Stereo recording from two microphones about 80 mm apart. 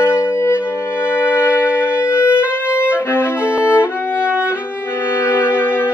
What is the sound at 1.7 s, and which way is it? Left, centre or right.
Music, left.